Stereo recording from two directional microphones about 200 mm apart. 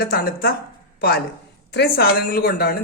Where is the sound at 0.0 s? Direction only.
50° left (ahead or behind).